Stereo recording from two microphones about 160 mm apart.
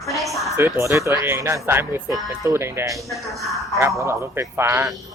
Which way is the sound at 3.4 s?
Centre (ahead or behind).